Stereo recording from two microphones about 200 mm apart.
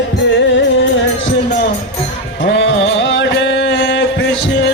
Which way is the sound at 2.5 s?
65° left (ahead or behind).